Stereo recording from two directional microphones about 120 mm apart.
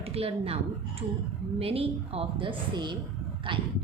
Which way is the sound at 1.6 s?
55° right (ahead or behind).